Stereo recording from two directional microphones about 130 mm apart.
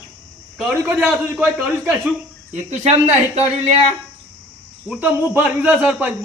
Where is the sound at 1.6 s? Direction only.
10° right (ahead or behind).